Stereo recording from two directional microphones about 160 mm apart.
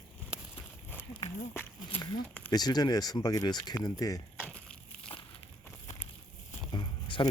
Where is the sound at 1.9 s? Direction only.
30° left (ahead or behind).